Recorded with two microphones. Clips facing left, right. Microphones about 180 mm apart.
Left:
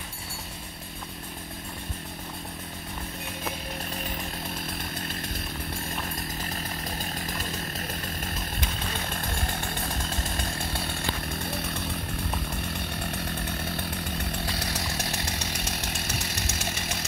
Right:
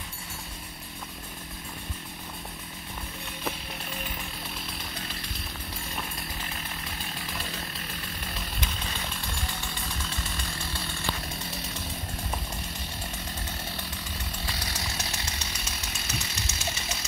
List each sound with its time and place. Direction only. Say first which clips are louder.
7.2 s chainsaw: left 3 dB; 45° left (ahead or behind)
9.1 s chainsaw: left 4 dB; 55° left (ahead or behind)
12.7 s chainsaw: left 5 dB; 60° left (ahead or behind)